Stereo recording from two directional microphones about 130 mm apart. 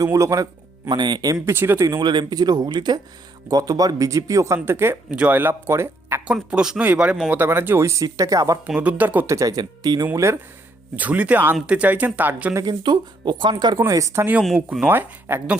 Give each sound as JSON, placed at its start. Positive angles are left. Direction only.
{"t": 0.0, "sound": "speech", "side_deg": -25}
{"t": 0.9, "sound": "speech", "side_deg": -35}
{"t": 2.0, "sound": "speech", "side_deg": -35}
{"t": 6.2, "sound": "speech", "side_deg": -5}
{"t": 8.6, "sound": "speech", "side_deg": -10}
{"t": 10.1, "sound": "speech", "side_deg": -20}
{"t": 12.5, "sound": "speech", "side_deg": -30}
{"t": 13.7, "sound": "speech", "side_deg": -25}
{"t": 14.4, "sound": "speech", "side_deg": -5}
{"t": 14.8, "sound": "speech", "side_deg": -15}